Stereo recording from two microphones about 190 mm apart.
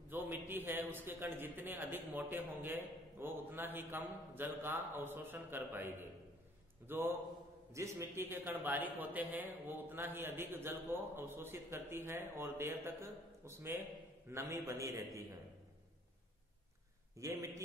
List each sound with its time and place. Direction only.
0.1 s speech: 10° right (ahead or behind)
17.2 s speech: 15° right (ahead or behind)